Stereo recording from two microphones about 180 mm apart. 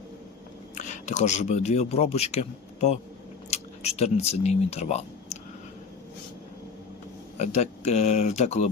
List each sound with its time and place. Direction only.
0.8 s a man's voice: 45° left (ahead or behind)
7.3 s speech: 40° left (ahead or behind)